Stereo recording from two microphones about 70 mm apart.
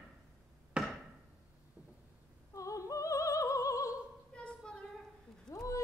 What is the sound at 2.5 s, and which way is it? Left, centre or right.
Opera, left.